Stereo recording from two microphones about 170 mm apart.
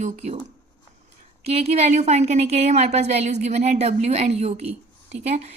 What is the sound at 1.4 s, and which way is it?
Speech, 35° right (ahead or behind).